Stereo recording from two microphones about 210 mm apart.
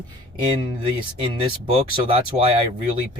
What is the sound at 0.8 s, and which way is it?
Speech, 25° right (ahead or behind).